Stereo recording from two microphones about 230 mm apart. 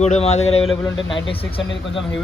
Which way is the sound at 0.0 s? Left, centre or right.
Left.